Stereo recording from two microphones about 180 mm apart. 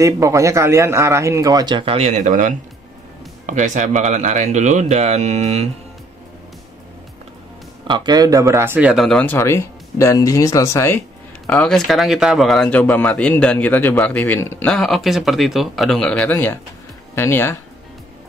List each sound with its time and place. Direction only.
0.0 s speech: 15° right (ahead or behind); by 5.7 s 35° right (ahead or behind)
7.8 s speech: 25° right (ahead or behind); by 11.0 s 15° left (ahead or behind)
11.4 s speech: 5° left (ahead or behind)